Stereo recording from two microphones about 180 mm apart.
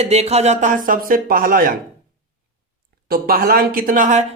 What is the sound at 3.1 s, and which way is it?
A man's voice, 55° right (ahead or behind).